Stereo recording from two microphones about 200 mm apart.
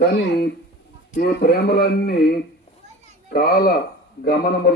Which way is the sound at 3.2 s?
50° left (ahead or behind).